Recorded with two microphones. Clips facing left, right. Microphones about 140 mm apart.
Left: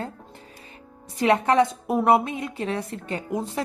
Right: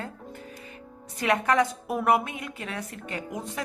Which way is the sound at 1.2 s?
25° left (ahead or behind).